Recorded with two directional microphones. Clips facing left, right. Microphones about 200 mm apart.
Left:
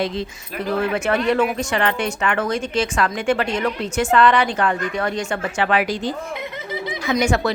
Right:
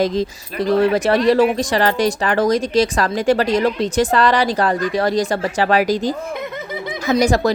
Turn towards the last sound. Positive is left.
turn(degrees=-35)  # may be behind; listen again after turning